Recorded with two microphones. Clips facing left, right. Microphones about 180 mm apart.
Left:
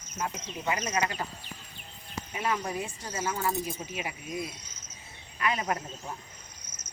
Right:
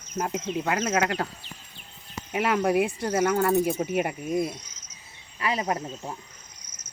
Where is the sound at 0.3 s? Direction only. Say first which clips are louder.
Right 8 dB; 85° right.